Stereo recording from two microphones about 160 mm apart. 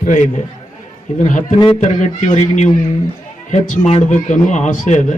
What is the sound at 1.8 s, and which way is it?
Speech, 45° left (ahead or behind).